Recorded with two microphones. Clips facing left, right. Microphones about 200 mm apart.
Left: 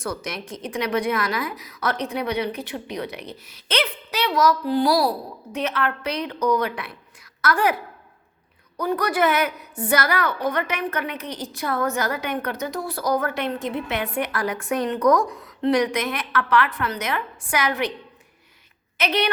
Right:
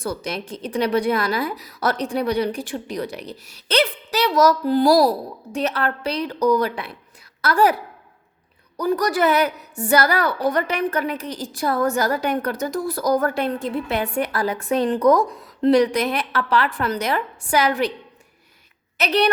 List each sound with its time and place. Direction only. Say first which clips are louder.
0.0 s a woman's voice: right 3 dB; 30° right (ahead or behind)
8.8 s a woman's voice: right 2 dB; 35° right (ahead or behind)
19.0 s a woman's voice: right 4 dB; 35° right (ahead or behind)